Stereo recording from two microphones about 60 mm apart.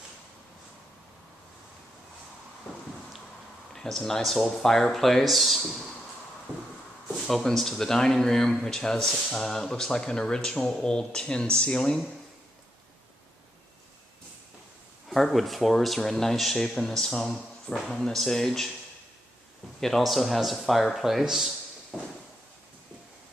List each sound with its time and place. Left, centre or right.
3.7 s speech: centre
7.2 s speech: centre
15.0 s speech: centre
19.8 s speech: centre
21.9 s a sound: centre